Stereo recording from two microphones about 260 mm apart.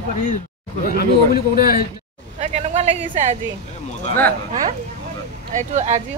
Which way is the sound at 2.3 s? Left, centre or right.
Right.